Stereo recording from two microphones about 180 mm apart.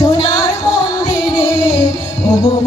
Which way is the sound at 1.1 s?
5° right (ahead or behind).